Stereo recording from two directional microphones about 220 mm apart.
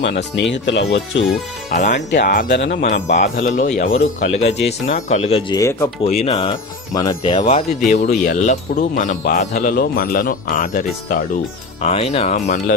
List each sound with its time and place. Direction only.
0.0 s speech: 50° left (ahead or behind)
1.7 s speech: 35° left (ahead or behind)
2.0 s speech: 45° left (ahead or behind)
2.8 s speech: 35° left (ahead or behind)
4.5 s speech: 50° left (ahead or behind)
4.9 s speech: 30° left (ahead or behind); by 5.9 s 15° left (ahead or behind)
6.1 s speech: 30° left (ahead or behind)
6.3 s speech: 20° left (ahead or behind); by 11.3 s 40° left (ahead or behind)
11.8 s speech: 30° left (ahead or behind)